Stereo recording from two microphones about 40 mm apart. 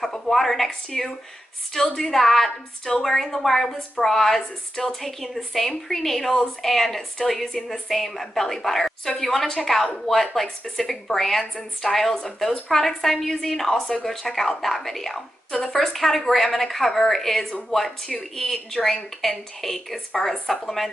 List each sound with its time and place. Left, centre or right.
0.0 s a woman's voice: centre